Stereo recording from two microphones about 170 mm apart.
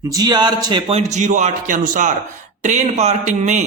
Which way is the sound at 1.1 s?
45° right (ahead or behind).